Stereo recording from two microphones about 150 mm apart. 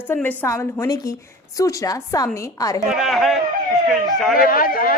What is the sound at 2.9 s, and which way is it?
Speech, centre (ahead or behind).